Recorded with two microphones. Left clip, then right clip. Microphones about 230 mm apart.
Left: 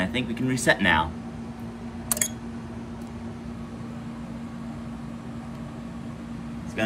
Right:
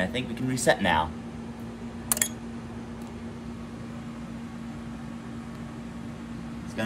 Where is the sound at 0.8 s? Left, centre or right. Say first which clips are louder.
Left 3 dB; centre.